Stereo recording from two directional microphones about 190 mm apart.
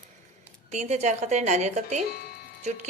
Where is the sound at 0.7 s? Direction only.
35° right (ahead or behind).